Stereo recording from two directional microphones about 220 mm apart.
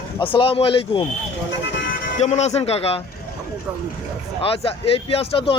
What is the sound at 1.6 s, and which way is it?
Bagpipes, 55° left (ahead or behind).